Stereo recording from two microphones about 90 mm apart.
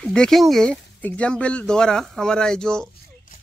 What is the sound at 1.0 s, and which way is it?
Speech, 15° left (ahead or behind).